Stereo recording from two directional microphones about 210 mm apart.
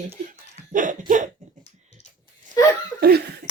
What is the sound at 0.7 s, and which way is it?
Speech, 40° right (ahead or behind).